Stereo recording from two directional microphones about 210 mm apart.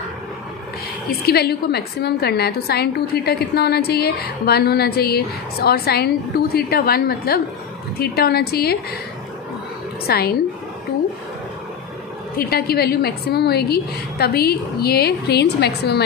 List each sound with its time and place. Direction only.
1.2 s a woman's voice: 50° left (ahead or behind)
10.0 s a woman's voice: 50° left (ahead or behind)
12.4 s a woman's voice: 45° left (ahead or behind)